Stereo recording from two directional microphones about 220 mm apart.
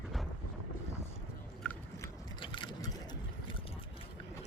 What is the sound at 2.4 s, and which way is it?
Vehicle, 20° left (ahead or behind).